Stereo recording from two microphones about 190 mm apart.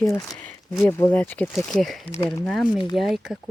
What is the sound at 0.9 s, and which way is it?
Speech, 15° left (ahead or behind).